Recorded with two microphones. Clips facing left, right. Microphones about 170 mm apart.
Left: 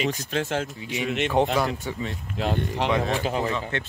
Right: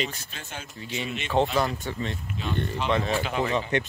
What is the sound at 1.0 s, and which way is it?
Speech, 70° left (ahead or behind).